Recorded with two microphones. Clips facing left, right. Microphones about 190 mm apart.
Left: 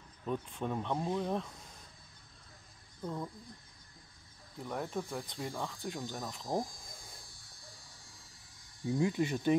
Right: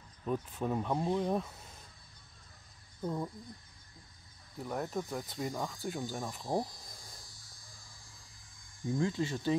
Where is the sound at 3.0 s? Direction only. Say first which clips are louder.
Right 3 dB; 10° right (ahead or behind).